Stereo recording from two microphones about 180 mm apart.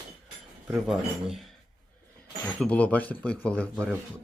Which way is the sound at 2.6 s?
5° left (ahead or behind).